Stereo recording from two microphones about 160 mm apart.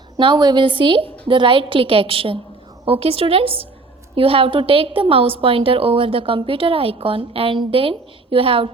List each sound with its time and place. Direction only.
0.2 s a woman's voice: 30° right (ahead or behind)